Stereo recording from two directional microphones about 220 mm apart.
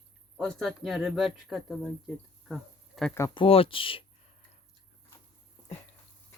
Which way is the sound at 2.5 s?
Centre (ahead or behind).